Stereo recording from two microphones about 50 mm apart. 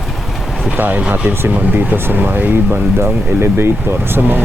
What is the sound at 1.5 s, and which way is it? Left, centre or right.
A man's voice, right.